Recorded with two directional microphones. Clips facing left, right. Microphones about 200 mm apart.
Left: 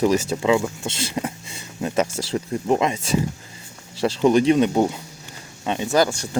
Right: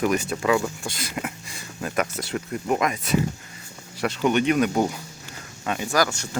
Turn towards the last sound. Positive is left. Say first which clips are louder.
# left 4 dB
turn(degrees=30)  # may be behind; listen again after turning